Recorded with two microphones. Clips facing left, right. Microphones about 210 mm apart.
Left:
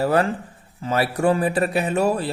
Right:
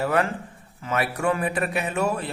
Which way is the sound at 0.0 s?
35° left (ahead or behind).